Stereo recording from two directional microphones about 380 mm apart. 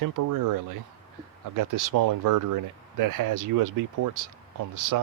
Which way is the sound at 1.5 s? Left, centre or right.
Right.